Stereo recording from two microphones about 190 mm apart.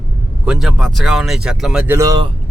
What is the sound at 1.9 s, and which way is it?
Speech, 20° right (ahead or behind).